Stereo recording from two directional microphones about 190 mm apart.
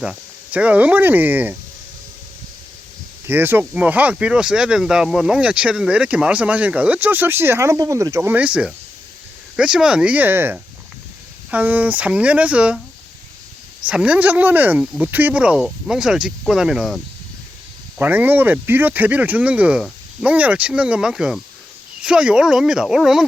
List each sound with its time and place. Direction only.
0.0 s speech: 5° right (ahead or behind)
3.2 s speech: 10° right (ahead or behind)
13.8 s speech: 5° right (ahead or behind)